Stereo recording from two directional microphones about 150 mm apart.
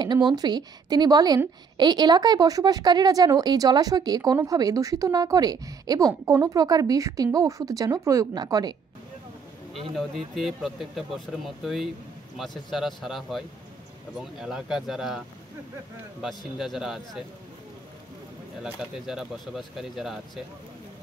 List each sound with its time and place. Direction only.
0.0 s a woman's voice: 30° right (ahead or behind)
9.9 s speech: centre (ahead or behind)
18.6 s speech: 5° right (ahead or behind)